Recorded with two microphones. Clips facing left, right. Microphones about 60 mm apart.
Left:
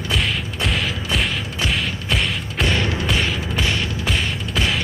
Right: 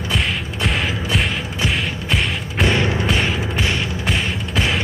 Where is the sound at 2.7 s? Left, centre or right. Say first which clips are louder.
Right 3 dB; centre.